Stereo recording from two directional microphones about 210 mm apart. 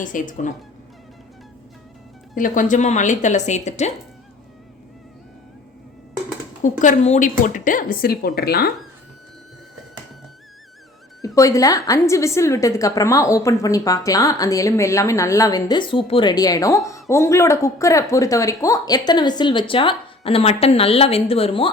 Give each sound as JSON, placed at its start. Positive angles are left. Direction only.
{"t": 0.0, "sound": "a woman's voice", "side_deg": 40}
{"t": 2.3, "sound": "a woman's voice", "side_deg": 40}
{"t": 6.6, "sound": "a woman's voice", "side_deg": 35}
{"t": 11.3, "sound": "a woman's voice", "side_deg": 15}